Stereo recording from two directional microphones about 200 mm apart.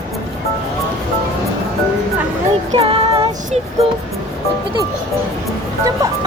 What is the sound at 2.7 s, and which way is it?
Female singing, 25° right (ahead or behind).